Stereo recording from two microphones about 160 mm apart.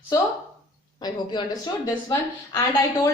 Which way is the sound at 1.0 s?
25° left (ahead or behind).